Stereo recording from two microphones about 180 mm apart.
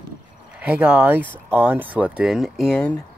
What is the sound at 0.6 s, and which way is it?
Speech, 5° right (ahead or behind).